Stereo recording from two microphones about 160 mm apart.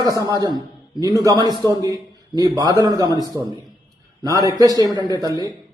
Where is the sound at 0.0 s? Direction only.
20° right (ahead or behind).